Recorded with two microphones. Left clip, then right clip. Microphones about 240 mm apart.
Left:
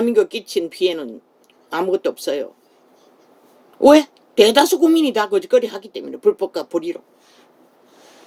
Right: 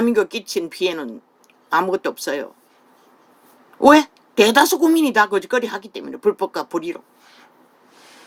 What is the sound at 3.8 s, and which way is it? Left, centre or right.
Speech, right.